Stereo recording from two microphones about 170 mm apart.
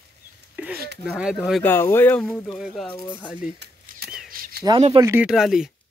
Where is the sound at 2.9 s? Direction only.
25° left (ahead or behind).